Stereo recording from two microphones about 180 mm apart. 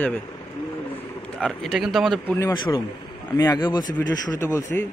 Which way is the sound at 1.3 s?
Centre (ahead or behind).